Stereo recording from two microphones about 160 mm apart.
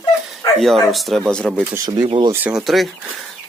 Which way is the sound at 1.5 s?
10° right (ahead or behind).